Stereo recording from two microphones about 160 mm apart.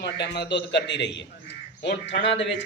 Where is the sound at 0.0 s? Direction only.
90° left.